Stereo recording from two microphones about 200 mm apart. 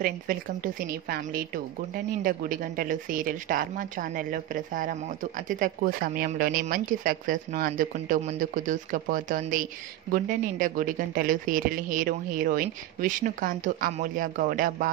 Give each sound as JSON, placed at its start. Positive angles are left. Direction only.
{"t": 0.0, "sound": "a woman's voice", "side_deg": -45}